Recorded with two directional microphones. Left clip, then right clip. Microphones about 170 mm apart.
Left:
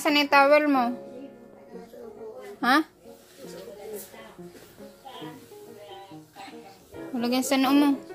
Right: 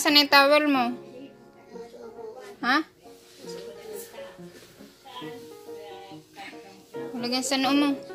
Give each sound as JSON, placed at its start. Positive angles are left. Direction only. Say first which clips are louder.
{"t": 0.0, "sound": "a woman's voice", "louder": "right 1 dB", "side_deg": 0}
{"t": 2.6, "sound": "a woman's voice", "louder": "left 2 dB", "side_deg": 20}
{"t": 7.2, "sound": "a woman's voice", "louder": "left 2 dB", "side_deg": 35}